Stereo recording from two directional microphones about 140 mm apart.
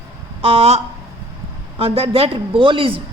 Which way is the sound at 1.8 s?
45° right (ahead or behind).